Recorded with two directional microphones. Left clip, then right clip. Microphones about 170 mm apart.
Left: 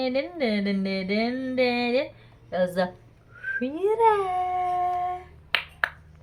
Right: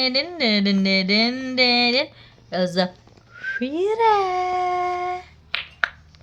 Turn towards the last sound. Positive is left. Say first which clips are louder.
# right 1 dB
turn(degrees=-30)  # may be behind; listen again after turning